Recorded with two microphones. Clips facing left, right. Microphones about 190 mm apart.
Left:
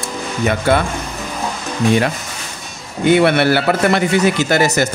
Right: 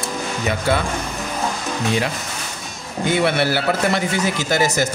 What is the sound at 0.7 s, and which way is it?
Speech, 60° left (ahead or behind).